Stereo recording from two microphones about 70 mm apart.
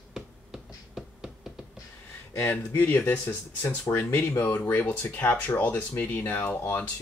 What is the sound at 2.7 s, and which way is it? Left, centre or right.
Speech, left.